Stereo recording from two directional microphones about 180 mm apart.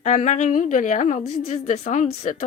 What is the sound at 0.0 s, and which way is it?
Speech, 45° left (ahead or behind).